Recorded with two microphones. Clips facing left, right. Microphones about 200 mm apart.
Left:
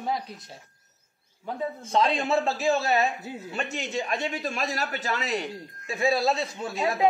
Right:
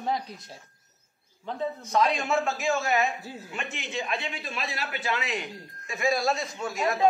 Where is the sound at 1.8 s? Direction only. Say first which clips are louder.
Left 1 dB; 30° left (ahead or behind).